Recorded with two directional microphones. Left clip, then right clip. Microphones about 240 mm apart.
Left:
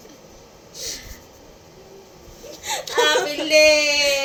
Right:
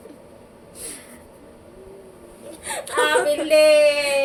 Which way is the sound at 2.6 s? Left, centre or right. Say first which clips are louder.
Left 3 dB; right.